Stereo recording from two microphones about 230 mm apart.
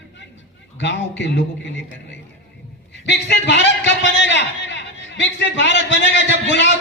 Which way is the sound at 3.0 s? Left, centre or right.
Left.